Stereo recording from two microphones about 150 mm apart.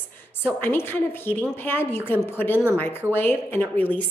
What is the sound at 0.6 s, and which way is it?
A woman's voice, 15° left (ahead or behind).